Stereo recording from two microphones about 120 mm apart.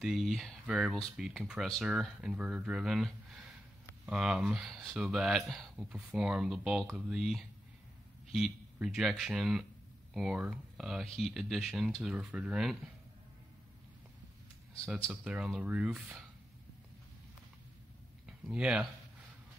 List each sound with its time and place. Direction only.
0.0 s a man's voice: centre (ahead or behind)
15.0 s speech: 5° right (ahead or behind)
18.2 s a sound: 5° right (ahead or behind)